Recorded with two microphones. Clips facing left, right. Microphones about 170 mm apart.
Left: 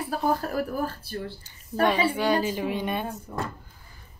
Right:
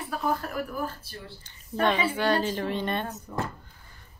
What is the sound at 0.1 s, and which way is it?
Speech, 30° left (ahead or behind).